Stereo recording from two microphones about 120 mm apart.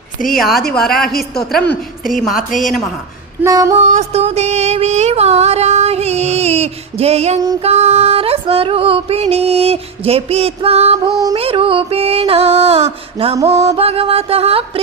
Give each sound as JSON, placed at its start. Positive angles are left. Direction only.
{"t": 0.3, "sound": "a woman's voice", "side_deg": 0}
{"t": 3.4, "sound": "female singing", "side_deg": -30}
{"t": 3.8, "sound": "music", "side_deg": -65}